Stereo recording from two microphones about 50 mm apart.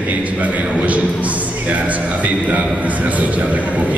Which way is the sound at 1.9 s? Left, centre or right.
Right.